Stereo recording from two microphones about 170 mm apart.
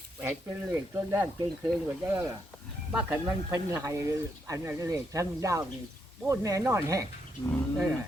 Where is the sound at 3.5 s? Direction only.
20° right (ahead or behind).